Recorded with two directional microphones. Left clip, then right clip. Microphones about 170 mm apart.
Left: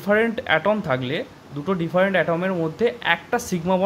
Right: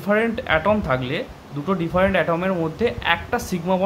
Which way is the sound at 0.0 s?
35° left (ahead or behind).